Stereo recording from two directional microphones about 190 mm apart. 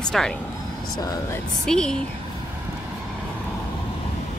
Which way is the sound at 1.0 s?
20° left (ahead or behind).